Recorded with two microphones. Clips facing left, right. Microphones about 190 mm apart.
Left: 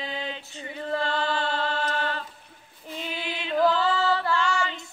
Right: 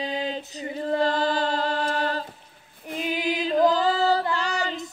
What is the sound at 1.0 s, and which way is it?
Chant, 40° right (ahead or behind).